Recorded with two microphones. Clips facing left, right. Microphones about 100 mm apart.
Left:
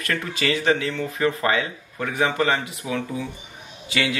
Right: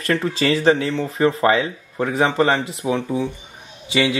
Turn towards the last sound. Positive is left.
turn(degrees=-25)  # may be behind; listen again after turning